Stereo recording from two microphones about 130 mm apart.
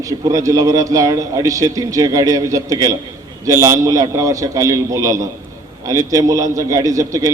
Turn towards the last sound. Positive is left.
turn(degrees=-25)  # may be behind; listen again after turning